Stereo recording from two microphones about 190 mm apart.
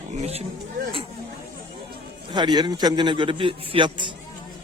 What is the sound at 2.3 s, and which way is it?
A man's voice, 25° right (ahead or behind).